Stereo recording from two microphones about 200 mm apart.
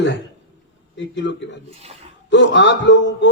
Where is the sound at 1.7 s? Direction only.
30° right (ahead or behind).